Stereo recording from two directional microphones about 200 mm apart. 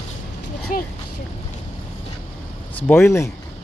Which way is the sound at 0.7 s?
40° left (ahead or behind).